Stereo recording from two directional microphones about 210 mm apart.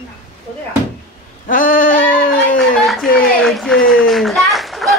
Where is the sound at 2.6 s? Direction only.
Centre (ahead or behind).